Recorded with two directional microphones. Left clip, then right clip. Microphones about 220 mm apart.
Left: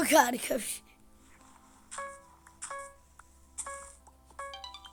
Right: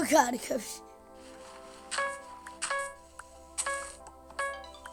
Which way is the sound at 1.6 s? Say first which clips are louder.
Right 9 dB; 40° right (ahead or behind).